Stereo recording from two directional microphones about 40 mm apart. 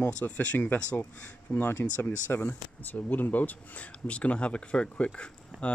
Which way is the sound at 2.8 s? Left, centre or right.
Left.